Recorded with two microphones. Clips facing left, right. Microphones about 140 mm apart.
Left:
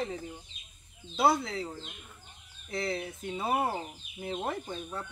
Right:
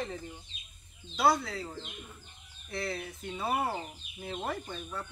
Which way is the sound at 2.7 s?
20° left (ahead or behind).